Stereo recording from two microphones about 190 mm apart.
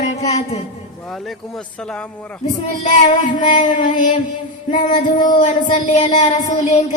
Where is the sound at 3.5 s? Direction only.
40° left (ahead or behind).